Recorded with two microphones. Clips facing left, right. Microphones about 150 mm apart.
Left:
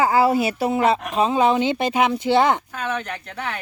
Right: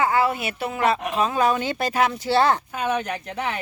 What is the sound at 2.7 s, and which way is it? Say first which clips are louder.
Speech: right 2 dB; 10° right (ahead or behind).